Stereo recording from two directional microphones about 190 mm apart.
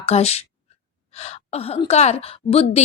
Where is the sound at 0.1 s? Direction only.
35° left (ahead or behind).